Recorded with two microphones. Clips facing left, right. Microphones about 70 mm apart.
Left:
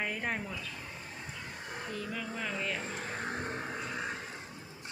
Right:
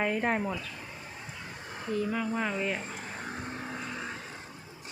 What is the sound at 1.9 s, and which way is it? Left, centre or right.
Speech, right.